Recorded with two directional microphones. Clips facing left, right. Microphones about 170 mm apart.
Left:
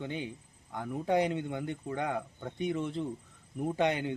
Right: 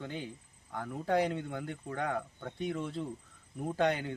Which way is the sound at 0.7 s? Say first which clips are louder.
Left 2 dB; 10° left (ahead or behind).